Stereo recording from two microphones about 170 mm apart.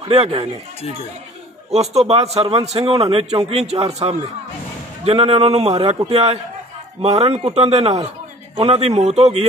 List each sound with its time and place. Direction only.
0.1 s a man's voice: 40° right (ahead or behind)
1.8 s a man's voice: 35° right (ahead or behind)